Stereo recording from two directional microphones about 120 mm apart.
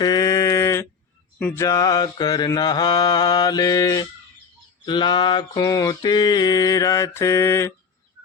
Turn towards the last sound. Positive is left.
turn(degrees=20)  # may be behind; listen again after turning